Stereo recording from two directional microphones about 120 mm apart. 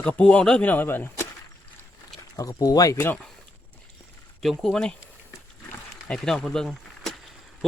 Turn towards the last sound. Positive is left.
turn(degrees=5)  # may be behind; listen again after turning